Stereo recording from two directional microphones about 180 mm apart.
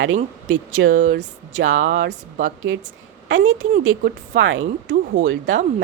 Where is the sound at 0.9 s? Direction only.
50° right (ahead or behind).